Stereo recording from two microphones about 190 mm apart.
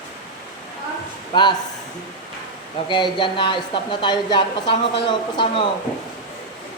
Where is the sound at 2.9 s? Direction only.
25° left (ahead or behind).